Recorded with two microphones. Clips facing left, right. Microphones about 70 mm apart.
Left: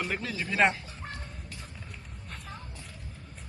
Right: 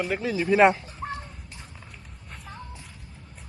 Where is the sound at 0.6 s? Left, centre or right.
Centre.